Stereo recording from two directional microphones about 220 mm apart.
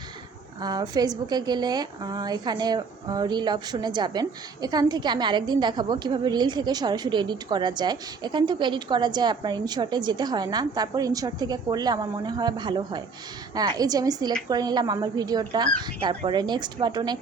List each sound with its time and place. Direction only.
0.6 s a woman's voice: 20° right (ahead or behind)